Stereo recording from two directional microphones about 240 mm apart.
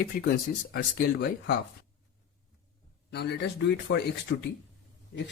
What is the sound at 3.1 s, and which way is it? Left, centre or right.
Speech, left.